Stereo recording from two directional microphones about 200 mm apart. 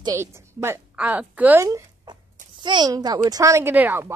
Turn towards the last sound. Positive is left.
turn(degrees=-10)  # may be behind; listen again after turning